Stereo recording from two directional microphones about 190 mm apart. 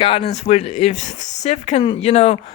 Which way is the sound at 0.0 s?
30° left (ahead or behind).